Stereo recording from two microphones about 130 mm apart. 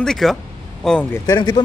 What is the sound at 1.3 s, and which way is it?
Speech, 35° left (ahead or behind).